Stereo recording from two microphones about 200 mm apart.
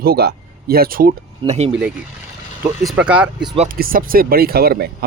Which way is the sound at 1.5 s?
35° right (ahead or behind).